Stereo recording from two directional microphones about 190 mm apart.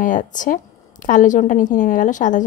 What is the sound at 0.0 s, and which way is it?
A woman's voice, 45° left (ahead or behind).